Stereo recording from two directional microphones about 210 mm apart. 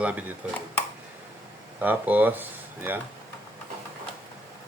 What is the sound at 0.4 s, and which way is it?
Speech, 5° right (ahead or behind).